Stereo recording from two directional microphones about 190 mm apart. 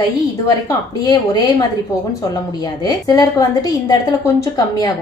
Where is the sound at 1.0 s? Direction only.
20° left (ahead or behind).